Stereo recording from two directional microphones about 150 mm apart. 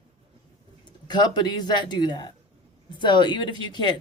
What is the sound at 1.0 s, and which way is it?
Speech, 30° left (ahead or behind).